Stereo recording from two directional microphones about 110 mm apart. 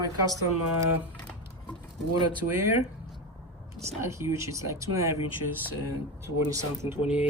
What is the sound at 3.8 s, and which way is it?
Speech, 25° right (ahead or behind).